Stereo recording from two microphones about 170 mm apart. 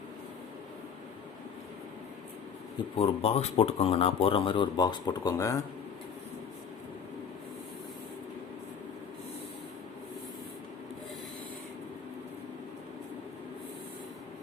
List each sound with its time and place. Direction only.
3.0 s speech: 35° left (ahead or behind); by 5.6 s 20° left (ahead or behind)